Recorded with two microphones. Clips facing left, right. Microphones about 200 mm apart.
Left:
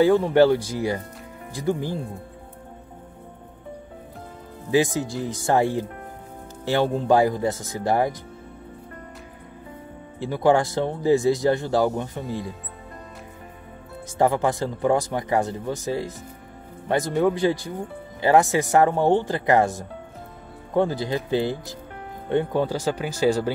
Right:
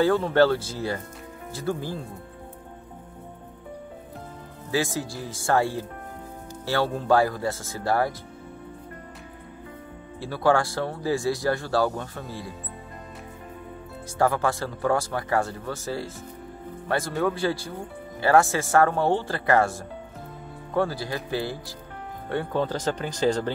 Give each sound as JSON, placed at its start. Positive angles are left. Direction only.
{"t": 0.0, "sound": "speech", "side_deg": 15}
{"t": 4.6, "sound": "speech", "side_deg": 20}
{"t": 10.1, "sound": "speech", "side_deg": 20}
{"t": 14.1, "sound": "speech", "side_deg": 20}